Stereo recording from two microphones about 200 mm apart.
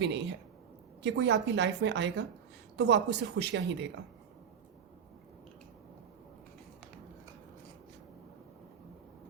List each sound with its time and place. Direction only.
0.0 s a woman's voice: 60° right (ahead or behind)